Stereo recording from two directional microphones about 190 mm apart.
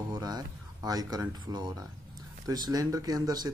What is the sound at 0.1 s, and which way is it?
Speech, 20° right (ahead or behind).